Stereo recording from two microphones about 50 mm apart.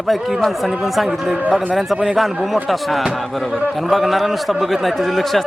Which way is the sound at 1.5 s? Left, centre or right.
Centre.